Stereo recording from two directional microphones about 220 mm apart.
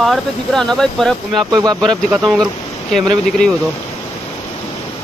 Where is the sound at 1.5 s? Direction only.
20° right (ahead or behind).